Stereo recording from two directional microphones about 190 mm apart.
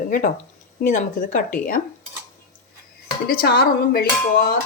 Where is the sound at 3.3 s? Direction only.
50° left (ahead or behind).